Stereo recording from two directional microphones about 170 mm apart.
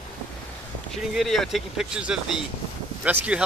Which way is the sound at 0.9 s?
Centre (ahead or behind).